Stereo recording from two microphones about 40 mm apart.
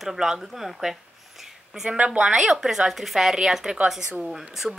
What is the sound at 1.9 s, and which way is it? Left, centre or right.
Speech, right.